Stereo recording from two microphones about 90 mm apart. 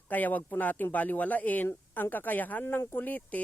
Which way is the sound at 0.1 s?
20° left (ahead or behind).